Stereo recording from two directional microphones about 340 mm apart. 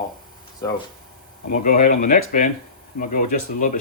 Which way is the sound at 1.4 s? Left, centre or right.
Left.